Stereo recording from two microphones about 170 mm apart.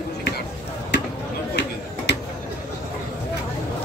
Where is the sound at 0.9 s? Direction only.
90° left.